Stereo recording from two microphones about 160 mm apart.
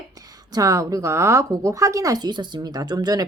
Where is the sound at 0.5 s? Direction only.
20° right (ahead or behind).